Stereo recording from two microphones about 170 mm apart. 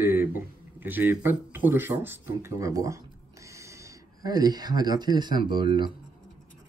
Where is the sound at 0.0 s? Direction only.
10° right (ahead or behind).